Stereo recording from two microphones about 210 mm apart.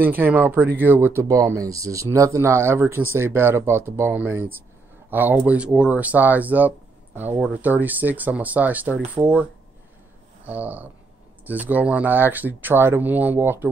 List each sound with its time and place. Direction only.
0.0 s speech: 10° right (ahead or behind)